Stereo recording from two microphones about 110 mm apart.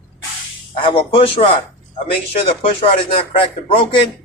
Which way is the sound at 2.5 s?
60° left (ahead or behind).